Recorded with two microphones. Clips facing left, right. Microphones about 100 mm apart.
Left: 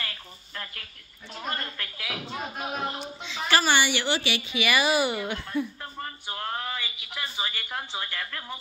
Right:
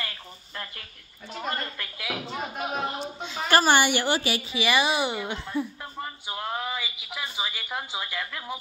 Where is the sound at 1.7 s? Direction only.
15° right (ahead or behind).